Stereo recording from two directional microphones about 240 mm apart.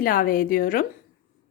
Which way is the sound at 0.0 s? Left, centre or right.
Left.